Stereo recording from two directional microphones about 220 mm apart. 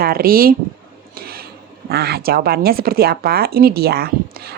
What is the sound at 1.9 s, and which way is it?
A woman's voice, 45° right (ahead or behind).